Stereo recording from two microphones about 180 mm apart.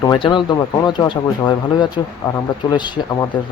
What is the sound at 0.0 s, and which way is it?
Speech, 25° left (ahead or behind).